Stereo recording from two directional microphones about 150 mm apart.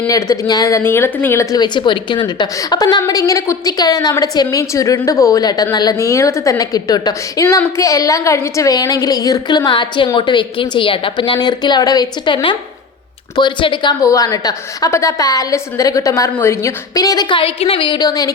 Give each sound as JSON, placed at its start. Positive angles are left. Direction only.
{"t": 0.1, "sound": "speech", "side_deg": 25}